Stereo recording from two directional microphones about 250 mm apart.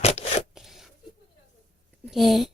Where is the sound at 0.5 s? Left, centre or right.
Centre.